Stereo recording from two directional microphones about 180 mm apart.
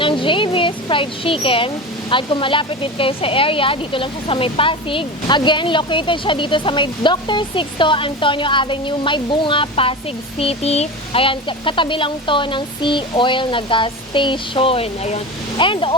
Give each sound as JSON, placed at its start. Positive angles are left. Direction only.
{"t": 0.0, "sound": "speech", "side_deg": 30}